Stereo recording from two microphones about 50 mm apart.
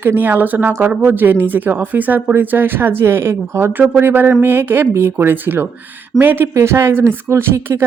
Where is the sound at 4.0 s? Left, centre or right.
Right.